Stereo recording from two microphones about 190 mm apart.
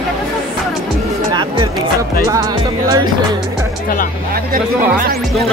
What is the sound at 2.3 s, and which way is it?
Music, 20° right (ahead or behind).